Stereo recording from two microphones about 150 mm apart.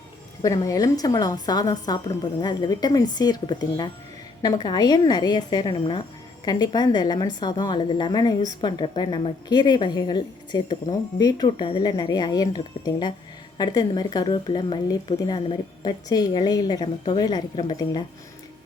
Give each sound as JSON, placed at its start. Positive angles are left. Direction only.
{"t": 0.4, "sound": "a woman's voice", "side_deg": 25}